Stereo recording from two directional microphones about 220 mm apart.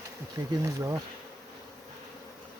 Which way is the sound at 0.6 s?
15° right (ahead or behind).